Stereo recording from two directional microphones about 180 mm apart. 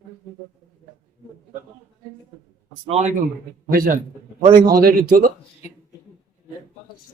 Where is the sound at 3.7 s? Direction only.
50° right (ahead or behind).